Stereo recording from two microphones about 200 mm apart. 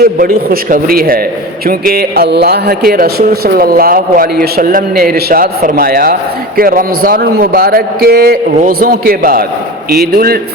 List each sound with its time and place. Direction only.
0.0 s a man's voice: 45° right (ahead or behind)